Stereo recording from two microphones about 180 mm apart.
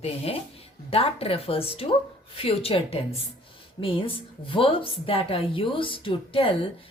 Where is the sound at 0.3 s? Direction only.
35° left (ahead or behind).